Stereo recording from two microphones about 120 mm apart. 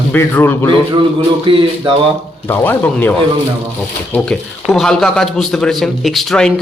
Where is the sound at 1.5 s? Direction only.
50° right (ahead or behind).